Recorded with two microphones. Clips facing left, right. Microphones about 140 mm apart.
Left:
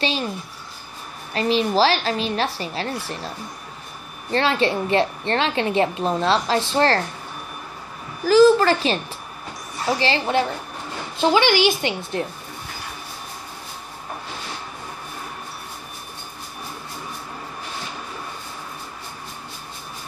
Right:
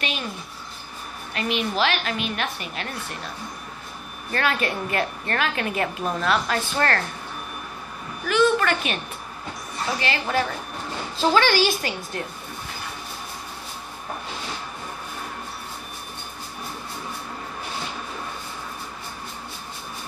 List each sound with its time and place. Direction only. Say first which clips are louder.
1.3 s a woman's voice: left 6 dB; 30° left (ahead or behind)
4.3 s a woman's voice: left 5 dB; 25° left (ahead or behind)
8.2 s a woman's voice: left 7 dB; 35° left (ahead or behind)